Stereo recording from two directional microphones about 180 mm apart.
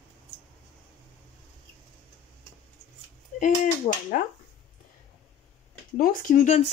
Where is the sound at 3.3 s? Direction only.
45° left (ahead or behind).